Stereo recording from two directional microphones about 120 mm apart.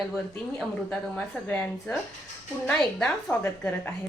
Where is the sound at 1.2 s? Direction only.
10° left (ahead or behind).